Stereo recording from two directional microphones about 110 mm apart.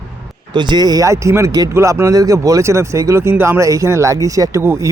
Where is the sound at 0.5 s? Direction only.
40° right (ahead or behind).